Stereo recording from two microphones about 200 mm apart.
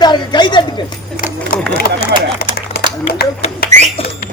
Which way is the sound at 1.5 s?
45° left (ahead or behind).